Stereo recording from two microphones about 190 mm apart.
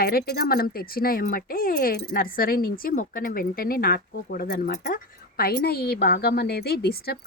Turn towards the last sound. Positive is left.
turn(degrees=55)  # may be behind; listen again after turning